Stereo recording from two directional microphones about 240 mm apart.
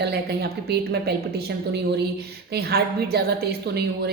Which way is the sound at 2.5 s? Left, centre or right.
Right.